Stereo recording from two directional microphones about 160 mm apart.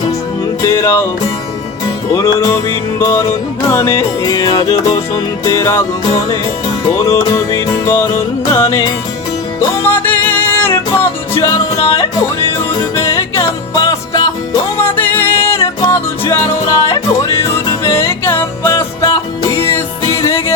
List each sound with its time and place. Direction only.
0.6 s music: 15° left (ahead or behind)
2.1 s music: 20° left (ahead or behind)
6.9 s music: 20° left (ahead or behind)
13.0 s music: 20° left (ahead or behind)
14.8 s music: 10° left (ahead or behind); by 19.6 s 25° left (ahead or behind)
19.6 s music: 15° left (ahead or behind)